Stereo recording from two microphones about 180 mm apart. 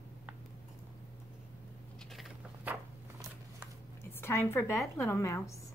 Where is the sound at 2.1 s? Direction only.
Centre (ahead or behind).